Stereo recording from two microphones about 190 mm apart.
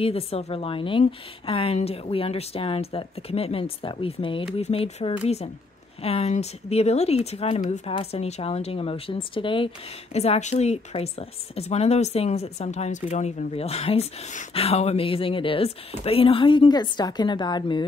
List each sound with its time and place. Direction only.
0.0 s a woman's voice: 30° left (ahead or behind)